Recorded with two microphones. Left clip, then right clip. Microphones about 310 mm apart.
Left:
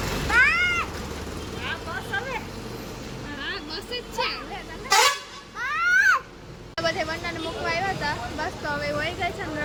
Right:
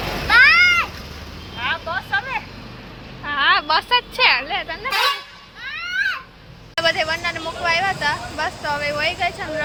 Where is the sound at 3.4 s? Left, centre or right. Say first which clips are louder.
Right 18 dB; centre.